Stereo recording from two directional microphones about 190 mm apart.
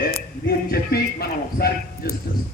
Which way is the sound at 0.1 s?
55° left (ahead or behind).